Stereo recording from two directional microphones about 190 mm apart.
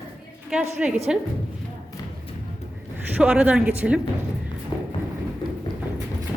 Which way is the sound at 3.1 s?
5° right (ahead or behind).